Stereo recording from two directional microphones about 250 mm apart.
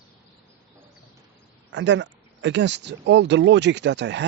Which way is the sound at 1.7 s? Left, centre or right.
Right.